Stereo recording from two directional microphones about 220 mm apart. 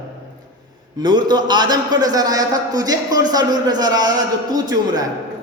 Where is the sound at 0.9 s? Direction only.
20° right (ahead or behind).